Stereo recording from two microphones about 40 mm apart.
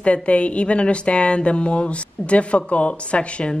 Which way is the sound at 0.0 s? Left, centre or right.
Left.